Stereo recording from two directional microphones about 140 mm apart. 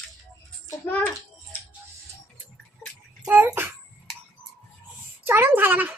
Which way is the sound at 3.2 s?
15° right (ahead or behind).